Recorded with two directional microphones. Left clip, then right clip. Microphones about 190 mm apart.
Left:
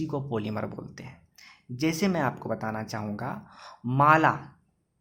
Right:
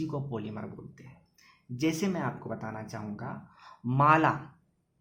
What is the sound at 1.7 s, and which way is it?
Speech, 20° left (ahead or behind).